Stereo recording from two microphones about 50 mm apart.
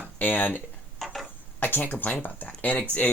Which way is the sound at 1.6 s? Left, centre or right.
Left.